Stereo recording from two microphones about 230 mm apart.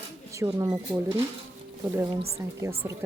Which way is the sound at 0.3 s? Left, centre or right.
Centre.